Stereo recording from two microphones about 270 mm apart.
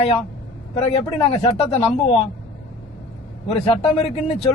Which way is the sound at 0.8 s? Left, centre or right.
Left.